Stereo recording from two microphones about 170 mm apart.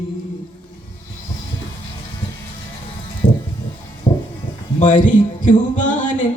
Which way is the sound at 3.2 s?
50° left (ahead or behind).